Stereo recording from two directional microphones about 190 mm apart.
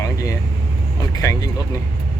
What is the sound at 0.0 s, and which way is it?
Vehicle, 15° left (ahead or behind).